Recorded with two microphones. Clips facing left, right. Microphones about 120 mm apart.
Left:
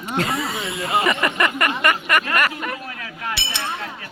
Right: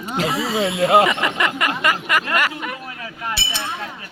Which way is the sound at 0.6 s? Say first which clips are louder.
Right 12 dB; 75° right (ahead or behind).